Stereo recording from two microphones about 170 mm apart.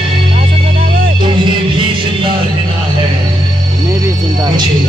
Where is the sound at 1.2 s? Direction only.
30° right (ahead or behind).